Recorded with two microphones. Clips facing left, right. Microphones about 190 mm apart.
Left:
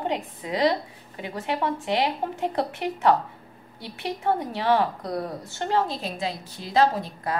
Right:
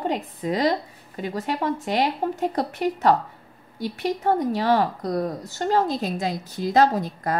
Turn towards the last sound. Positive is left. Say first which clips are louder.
# right 3 dB
turn(degrees=-45)  # may be behind; listen again after turning